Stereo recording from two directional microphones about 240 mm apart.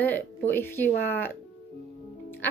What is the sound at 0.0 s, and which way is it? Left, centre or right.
A woman's voice, centre.